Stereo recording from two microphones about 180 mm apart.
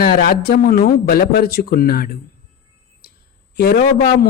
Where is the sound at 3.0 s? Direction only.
60° left (ahead or behind).